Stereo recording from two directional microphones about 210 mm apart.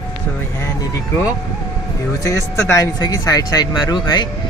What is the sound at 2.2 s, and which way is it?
Speech, 15° left (ahead or behind).